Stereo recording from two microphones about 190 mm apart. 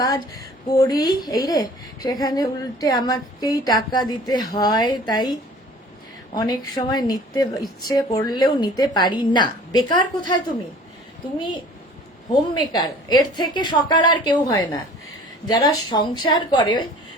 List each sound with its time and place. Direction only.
0.0 s a woman's voice: 15° left (ahead or behind)
11.3 s a woman's voice: 25° left (ahead or behind)